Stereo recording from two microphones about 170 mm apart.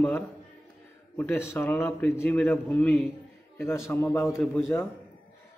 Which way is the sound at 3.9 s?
15° left (ahead or behind).